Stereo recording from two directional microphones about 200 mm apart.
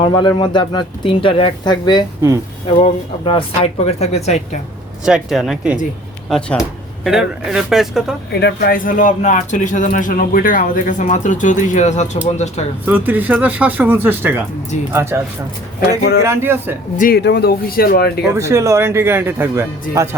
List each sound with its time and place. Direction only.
0.0 s speech: 25° left (ahead or behind)
5.0 s speech: 5° right (ahead or behind)
8.3 s speech: 55° left (ahead or behind); by 12.6 s 35° left (ahead or behind)
12.8 s a man's voice: 10° right (ahead or behind)
17.0 s speech: 50° left (ahead or behind)
18.3 s a man's voice: 15° right (ahead or behind)